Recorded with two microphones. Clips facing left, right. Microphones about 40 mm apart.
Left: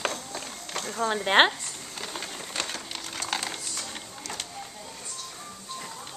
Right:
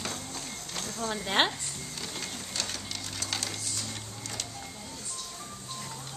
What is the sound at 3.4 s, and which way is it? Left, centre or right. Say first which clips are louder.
Coin: left 2 dB; left.